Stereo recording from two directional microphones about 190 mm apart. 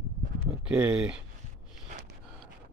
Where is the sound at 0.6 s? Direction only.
5° right (ahead or behind).